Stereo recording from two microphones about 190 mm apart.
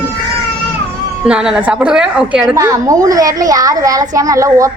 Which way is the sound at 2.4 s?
15° right (ahead or behind).